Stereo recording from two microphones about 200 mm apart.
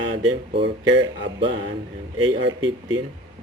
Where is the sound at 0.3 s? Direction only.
25° right (ahead or behind).